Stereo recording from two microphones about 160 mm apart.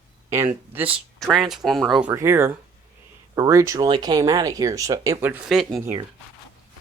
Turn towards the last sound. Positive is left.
turn(degrees=0)  # may be behind; listen again after turning